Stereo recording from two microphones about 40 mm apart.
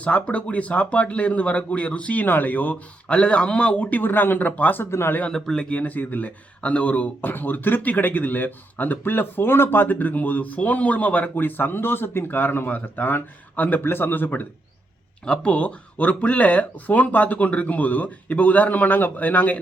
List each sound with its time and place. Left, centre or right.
0.0 s speech: left
2.2 s speech: left
3.1 s speech: left
3.8 s speech: left
4.8 s speech: left
5.3 s speech: centre
5.6 s speech: left
6.0 s speech: left
6.6 s speech: left
11.3 s speech: left
15.2 s speech: left